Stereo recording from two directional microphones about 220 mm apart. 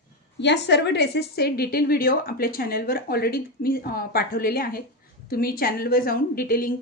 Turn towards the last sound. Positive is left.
turn(degrees=40)  # may be behind; listen again after turning